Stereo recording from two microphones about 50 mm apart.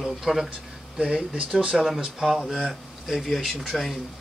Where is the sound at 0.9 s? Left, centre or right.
Centre.